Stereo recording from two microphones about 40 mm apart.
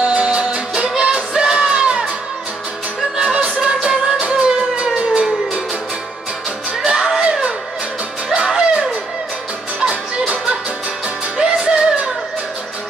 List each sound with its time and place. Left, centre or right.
0.0 s music: right
3.3 s music: right
6.8 s music: centre
8.5 s music: centre
11.3 s music: centre